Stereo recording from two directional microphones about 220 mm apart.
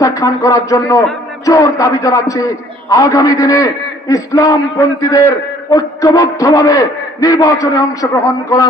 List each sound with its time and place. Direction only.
0.0 s a man's voice: 15° left (ahead or behind)